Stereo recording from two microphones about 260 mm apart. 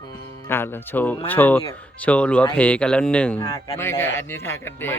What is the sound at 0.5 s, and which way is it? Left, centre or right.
A man's voice, centre.